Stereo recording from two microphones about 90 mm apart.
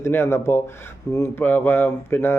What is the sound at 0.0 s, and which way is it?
A man's voice, 30° left (ahead or behind).